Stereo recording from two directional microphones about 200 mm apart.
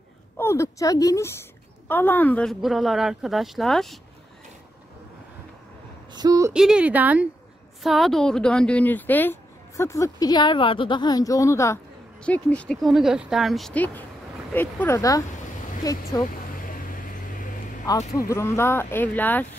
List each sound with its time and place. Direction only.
0.4 s speech: 15° left (ahead or behind)
6.1 s speech: 20° right (ahead or behind)
6.5 s speech: 5° right (ahead or behind); by 16.0 s 20° left (ahead or behind)
16.5 s vehicle: 45° left (ahead or behind)
17.8 s speech: 15° left (ahead or behind)